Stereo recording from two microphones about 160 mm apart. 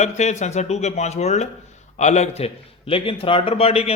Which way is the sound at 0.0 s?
45° left (ahead or behind).